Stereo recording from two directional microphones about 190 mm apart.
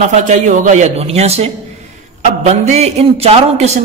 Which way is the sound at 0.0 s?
40° right (ahead or behind).